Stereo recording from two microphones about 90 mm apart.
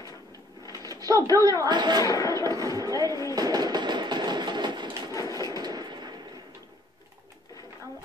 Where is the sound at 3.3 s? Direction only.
45° right (ahead or behind).